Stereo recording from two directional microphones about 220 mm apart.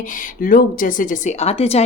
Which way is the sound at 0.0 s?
35° left (ahead or behind).